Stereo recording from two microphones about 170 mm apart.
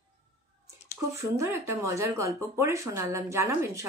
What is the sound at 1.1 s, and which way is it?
A woman's voice, 15° right (ahead or behind).